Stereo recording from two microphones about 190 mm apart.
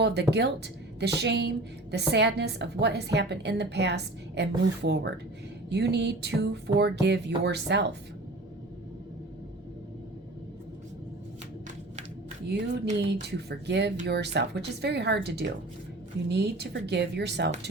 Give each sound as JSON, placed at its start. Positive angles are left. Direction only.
{"t": 0.0, "sound": "a woman's voice", "side_deg": -60}
{"t": 12.5, "sound": "a woman's voice", "side_deg": -65}